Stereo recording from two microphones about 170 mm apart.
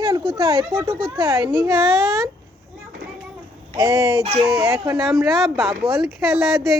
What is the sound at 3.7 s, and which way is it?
Speech, 20° right (ahead or behind).